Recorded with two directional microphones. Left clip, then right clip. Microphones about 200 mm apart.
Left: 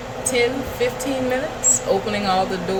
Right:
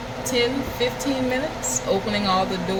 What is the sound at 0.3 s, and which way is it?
Speech, 10° right (ahead or behind).